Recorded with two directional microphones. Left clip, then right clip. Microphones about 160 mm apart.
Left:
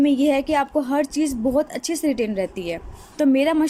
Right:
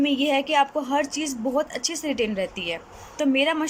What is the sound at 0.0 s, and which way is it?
A woman's voice, 30° left (ahead or behind).